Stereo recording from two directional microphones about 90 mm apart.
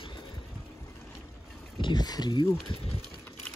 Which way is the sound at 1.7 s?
55° left (ahead or behind).